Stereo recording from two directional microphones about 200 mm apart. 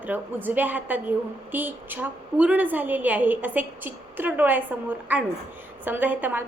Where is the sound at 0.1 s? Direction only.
10° right (ahead or behind).